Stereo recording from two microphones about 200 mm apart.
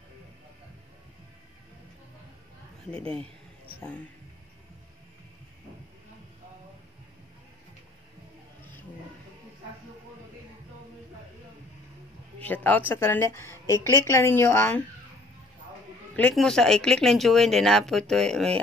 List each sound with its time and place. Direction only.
3.0 s a sound: 30° right (ahead or behind)
12.4 s a woman's voice: 10° left (ahead or behind)
16.2 s speech: 5° left (ahead or behind)